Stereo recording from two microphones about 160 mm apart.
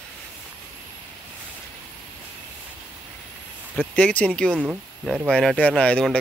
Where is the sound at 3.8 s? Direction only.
10° left (ahead or behind).